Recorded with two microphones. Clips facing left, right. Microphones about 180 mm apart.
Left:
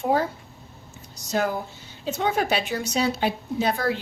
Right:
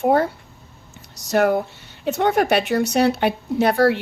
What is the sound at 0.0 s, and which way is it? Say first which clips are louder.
A woman's voice: right 5 dB; 60° right (ahead or behind).